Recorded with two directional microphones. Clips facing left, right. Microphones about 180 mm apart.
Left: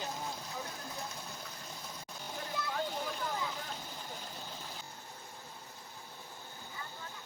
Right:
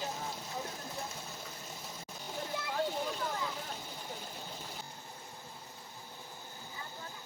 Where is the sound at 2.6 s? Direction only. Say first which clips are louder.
Left 2 dB; 25° right (ahead or behind).